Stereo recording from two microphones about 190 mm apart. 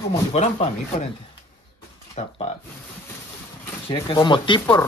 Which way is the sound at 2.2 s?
35° left (ahead or behind).